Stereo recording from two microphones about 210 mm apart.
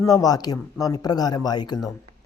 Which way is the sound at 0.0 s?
15° left (ahead or behind).